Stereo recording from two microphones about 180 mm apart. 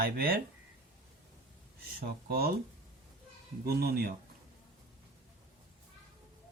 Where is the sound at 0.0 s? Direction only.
55° right (ahead or behind).